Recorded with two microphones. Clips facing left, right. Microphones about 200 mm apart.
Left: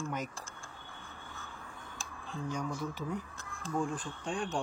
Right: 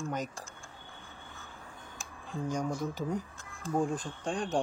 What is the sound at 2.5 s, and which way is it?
Speech, 45° right (ahead or behind).